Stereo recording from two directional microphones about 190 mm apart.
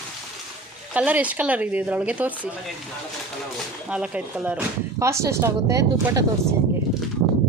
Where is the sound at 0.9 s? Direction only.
5° right (ahead or behind).